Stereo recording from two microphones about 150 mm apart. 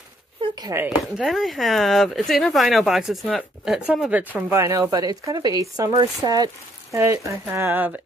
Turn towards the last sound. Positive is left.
turn(degrees=-10)  # may be behind; listen again after turning